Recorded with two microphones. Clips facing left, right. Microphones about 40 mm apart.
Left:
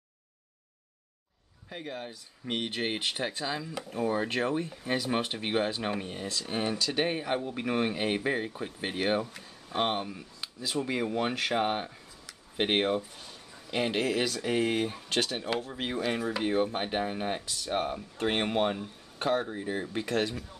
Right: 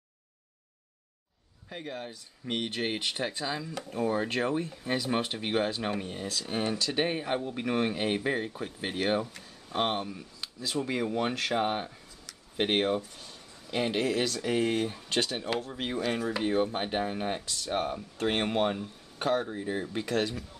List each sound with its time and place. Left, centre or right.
1.7 s speech: centre